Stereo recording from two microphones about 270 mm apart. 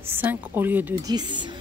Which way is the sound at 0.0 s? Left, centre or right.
Centre.